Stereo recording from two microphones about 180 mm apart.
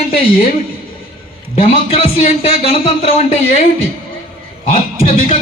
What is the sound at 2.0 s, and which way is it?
Speech, 35° left (ahead or behind).